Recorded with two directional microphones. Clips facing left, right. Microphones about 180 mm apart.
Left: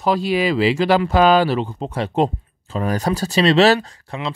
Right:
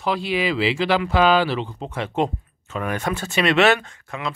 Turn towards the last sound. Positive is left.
turn(degrees=30)  # may be behind; listen again after turning